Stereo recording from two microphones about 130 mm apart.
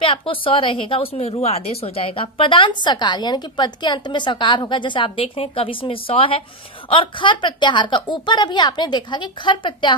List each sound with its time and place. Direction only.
0.0 s a woman's voice: 45° left (ahead or behind)